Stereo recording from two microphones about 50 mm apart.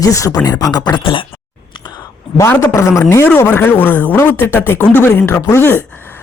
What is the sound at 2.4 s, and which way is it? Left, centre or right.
Speech, left.